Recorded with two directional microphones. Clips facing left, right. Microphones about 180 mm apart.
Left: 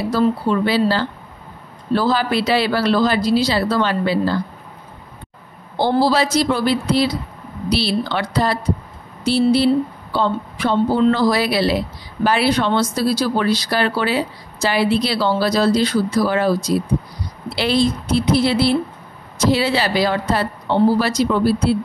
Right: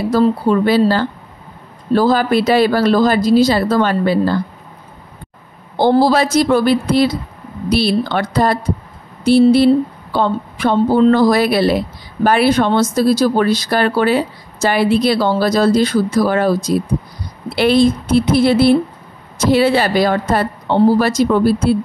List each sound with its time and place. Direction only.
0.1 s speech: 45° right (ahead or behind)
5.8 s speech: 50° right (ahead or behind)